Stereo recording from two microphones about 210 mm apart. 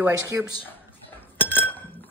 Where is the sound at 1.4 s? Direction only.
10° left (ahead or behind).